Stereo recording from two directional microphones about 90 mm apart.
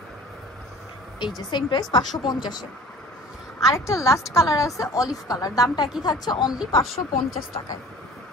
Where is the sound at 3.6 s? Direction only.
35° left (ahead or behind); by 6.6 s 50° left (ahead or behind).